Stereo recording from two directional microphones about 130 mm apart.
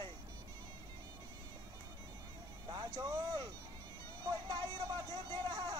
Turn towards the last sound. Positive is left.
turn(degrees=-30)  # may be behind; listen again after turning